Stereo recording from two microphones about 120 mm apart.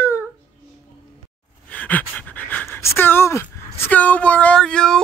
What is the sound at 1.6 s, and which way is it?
Pant, 10° left (ahead or behind).